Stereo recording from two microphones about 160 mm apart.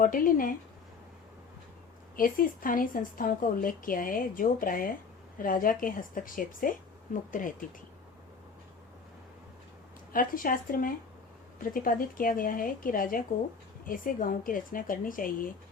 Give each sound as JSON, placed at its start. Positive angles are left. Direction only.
{"t": 0.0, "sound": "a woman's voice", "side_deg": 60}
{"t": 2.1, "sound": "a woman's voice", "side_deg": 60}
{"t": 10.1, "sound": "a woman's voice", "side_deg": 60}